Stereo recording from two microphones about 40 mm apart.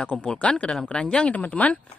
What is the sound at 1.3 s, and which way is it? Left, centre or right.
Speech, left.